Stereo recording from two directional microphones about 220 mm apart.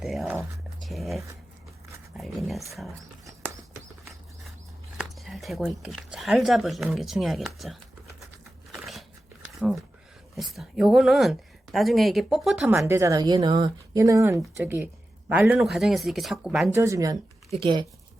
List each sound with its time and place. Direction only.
0.0 s a sound: centre (ahead or behind)
0.8 s speech: centre (ahead or behind)
2.1 s dog: centre (ahead or behind)
4.9 s speech: centre (ahead or behind)
8.7 s dog: centre (ahead or behind)
10.3 s a woman's voice: centre (ahead or behind); by 17.8 s 20° right (ahead or behind)